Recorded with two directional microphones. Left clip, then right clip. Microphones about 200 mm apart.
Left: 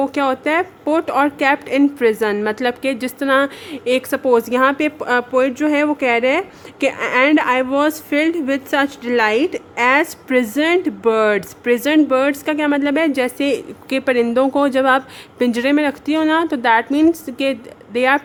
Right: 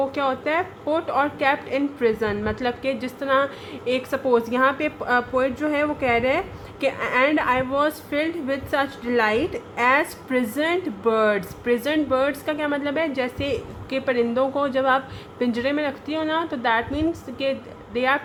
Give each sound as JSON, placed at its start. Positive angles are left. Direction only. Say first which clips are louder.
{"t": 0.0, "sound": "a woman's voice", "louder": "left 5 dB", "side_deg": 55}